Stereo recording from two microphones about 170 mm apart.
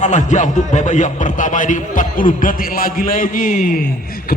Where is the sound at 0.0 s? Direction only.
45° left (ahead or behind).